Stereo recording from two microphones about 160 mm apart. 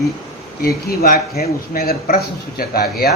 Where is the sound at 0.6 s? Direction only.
70° left (ahead or behind).